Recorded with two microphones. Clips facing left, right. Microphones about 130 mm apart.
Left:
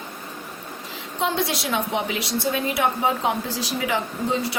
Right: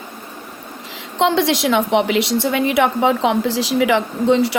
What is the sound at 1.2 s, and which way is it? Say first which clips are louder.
A woman's voice: right 8 dB; 90° right.